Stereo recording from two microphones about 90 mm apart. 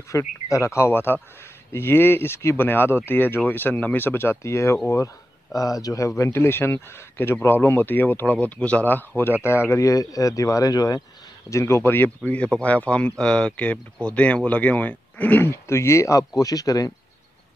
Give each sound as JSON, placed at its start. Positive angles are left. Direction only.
{"t": 0.1, "sound": "a man's voice", "side_deg": 35}
{"t": 11.5, "sound": "a man's voice", "side_deg": 30}
{"t": 12.2, "sound": "speech", "side_deg": 10}
{"t": 15.5, "sound": "speech", "side_deg": 30}